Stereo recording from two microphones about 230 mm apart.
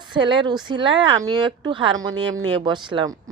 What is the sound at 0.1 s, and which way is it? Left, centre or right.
A woman's voice, centre.